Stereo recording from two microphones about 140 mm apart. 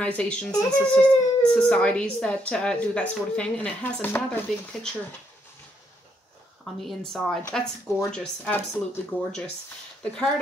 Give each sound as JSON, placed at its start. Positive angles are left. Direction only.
{"t": 0.0, "sound": "speech", "side_deg": 5}
{"t": 0.5, "sound": "speech", "side_deg": 25}
{"t": 0.8, "sound": "speech", "side_deg": 10}
{"t": 6.6, "sound": "a woman's voice", "side_deg": 5}